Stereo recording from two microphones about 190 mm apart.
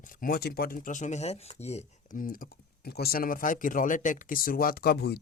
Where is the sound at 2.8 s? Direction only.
55° left (ahead or behind).